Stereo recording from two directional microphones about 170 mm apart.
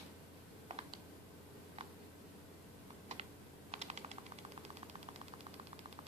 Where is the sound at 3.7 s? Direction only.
40° right (ahead or behind).